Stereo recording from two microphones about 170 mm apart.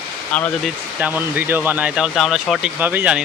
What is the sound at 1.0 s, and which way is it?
Speech, 10° right (ahead or behind).